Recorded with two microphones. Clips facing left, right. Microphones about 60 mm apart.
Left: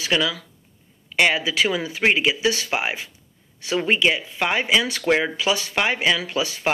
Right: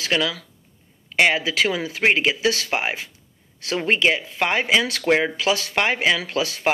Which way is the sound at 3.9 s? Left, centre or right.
Right.